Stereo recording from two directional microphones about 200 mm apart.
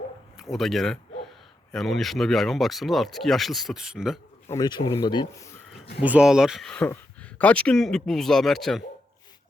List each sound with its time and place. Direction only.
0.5 s speech: centre (ahead or behind)
4.4 s speech: 20° left (ahead or behind)
6.0 s speech: 5° right (ahead or behind)